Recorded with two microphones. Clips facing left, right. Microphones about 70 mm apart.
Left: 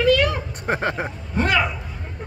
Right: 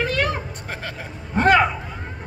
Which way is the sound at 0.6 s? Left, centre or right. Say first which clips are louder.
Left 9 dB; left.